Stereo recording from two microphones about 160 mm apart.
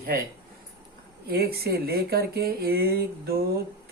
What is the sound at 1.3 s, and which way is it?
Speech, 75° right (ahead or behind).